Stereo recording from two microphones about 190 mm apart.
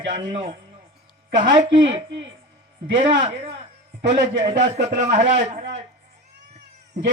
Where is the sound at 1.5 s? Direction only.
35° right (ahead or behind).